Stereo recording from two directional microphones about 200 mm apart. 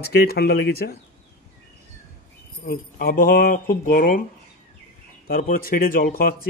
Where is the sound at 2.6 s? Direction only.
45° left (ahead or behind).